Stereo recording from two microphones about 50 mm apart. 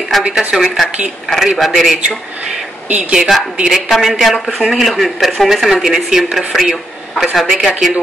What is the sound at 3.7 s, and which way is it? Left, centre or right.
A man's voice, centre.